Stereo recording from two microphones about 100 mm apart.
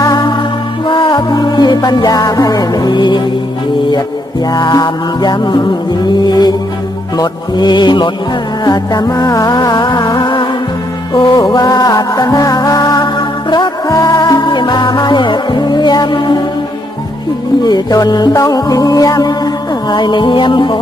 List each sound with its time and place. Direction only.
0.0 s music: 45° left (ahead or behind)
4.5 s music: 40° left (ahead or behind)
6.1 s mantra: 45° left (ahead or behind)
8.6 s music: 40° left (ahead or behind)
13.8 s music: 35° left (ahead or behind)
17.6 s music: 45° left (ahead or behind)
19.9 s mantra: 50° left (ahead or behind)